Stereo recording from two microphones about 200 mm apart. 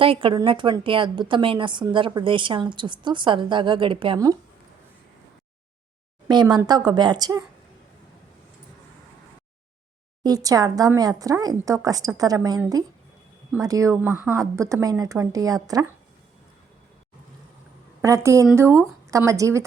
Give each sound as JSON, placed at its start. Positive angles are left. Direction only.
{"t": 0.0, "sound": "a woman's voice", "side_deg": -25}
{"t": 6.2, "sound": "a woman's voice", "side_deg": -20}
{"t": 10.2, "sound": "speech", "side_deg": -20}
{"t": 18.0, "sound": "speech", "side_deg": -15}